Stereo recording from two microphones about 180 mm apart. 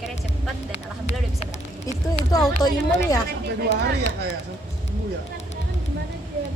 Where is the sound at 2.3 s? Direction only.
20° left (ahead or behind).